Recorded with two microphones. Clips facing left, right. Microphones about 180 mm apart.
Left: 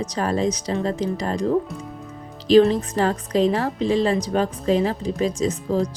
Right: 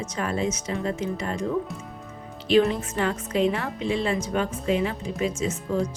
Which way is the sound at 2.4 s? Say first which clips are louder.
Left 6 dB; 35° left (ahead or behind).